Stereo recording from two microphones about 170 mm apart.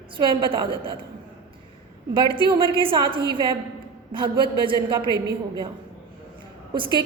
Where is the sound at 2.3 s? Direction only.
30° right (ahead or behind).